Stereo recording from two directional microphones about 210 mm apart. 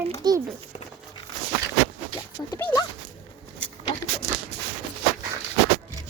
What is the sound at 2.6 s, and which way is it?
Dog, 20° left (ahead or behind).